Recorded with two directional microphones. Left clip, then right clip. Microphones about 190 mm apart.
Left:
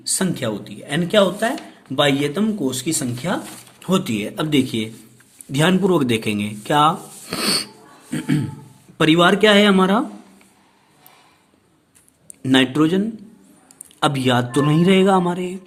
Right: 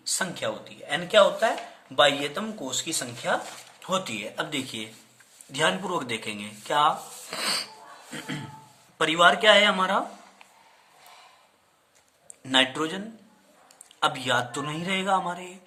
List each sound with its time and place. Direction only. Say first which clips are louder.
0.0 s speech: left 5 dB; 35° left (ahead or behind)
9.0 s speech: left 5 dB; 35° left (ahead or behind)
12.4 s speech: left 6 dB; 30° left (ahead or behind)
14.0 s speech: left 6 dB; 35° left (ahead or behind)